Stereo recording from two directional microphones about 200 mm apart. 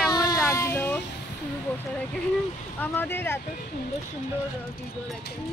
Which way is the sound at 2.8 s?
10° left (ahead or behind).